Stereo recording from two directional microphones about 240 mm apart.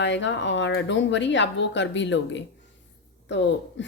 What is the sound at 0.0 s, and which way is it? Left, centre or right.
Speech, left.